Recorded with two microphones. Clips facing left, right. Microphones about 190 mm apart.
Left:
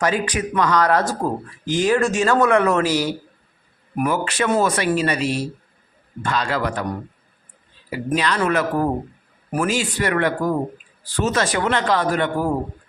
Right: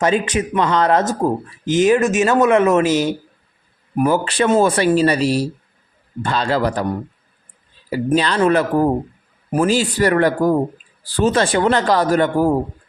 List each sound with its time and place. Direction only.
0.0 s speech: 25° right (ahead or behind)
7.9 s speech: 35° right (ahead or behind)